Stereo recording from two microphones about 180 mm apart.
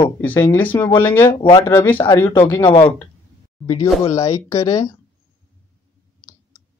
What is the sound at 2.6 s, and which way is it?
Speech, 25° left (ahead or behind).